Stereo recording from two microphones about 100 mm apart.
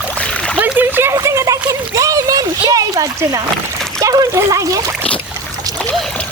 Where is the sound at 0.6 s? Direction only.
20° right (ahead or behind).